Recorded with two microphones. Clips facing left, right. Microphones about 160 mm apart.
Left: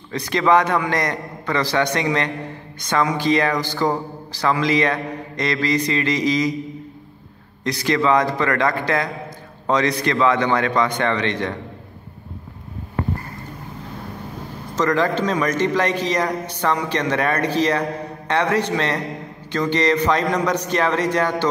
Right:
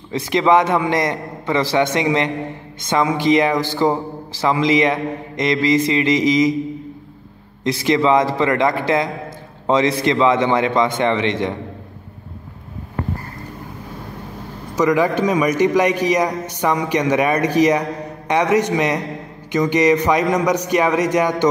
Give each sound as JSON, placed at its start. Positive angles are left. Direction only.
{"t": 0.1, "sound": "speech", "side_deg": -20}
{"t": 7.6, "sound": "speech", "side_deg": -20}
{"t": 14.8, "sound": "a man's voice", "side_deg": -15}